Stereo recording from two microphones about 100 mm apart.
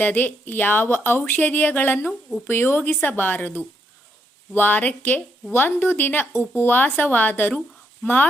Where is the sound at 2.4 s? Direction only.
20° left (ahead or behind).